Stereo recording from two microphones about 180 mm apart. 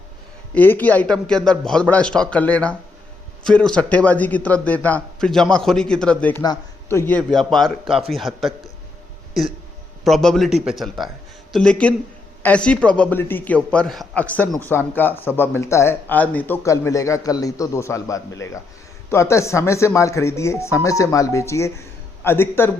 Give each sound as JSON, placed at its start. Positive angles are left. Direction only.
{"t": 0.5, "sound": "a man's voice", "side_deg": 10}
{"t": 10.0, "sound": "a man's voice", "side_deg": 0}